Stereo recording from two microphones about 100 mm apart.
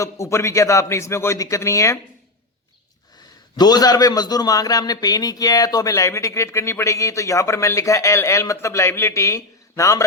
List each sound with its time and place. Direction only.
0.0 s a man's voice: 30° left (ahead or behind)
3.6 s a man's voice: 40° left (ahead or behind)